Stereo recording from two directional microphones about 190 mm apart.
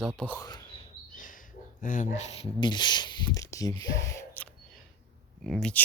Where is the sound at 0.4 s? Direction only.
20° left (ahead or behind).